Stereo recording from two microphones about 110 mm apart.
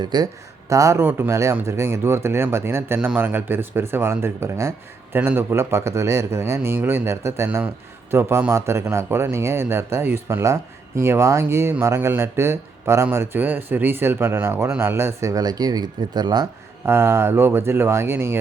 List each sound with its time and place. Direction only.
0.0 s speech: 40° right (ahead or behind)
0.7 s speech: 30° right (ahead or behind)
16.8 s speech: 20° right (ahead or behind)